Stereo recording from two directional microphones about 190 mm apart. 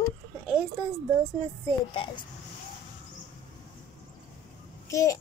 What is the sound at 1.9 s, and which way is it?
Speech, 25° left (ahead or behind).